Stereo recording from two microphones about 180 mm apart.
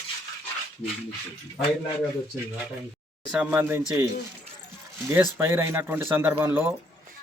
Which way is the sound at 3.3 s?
5° right (ahead or behind).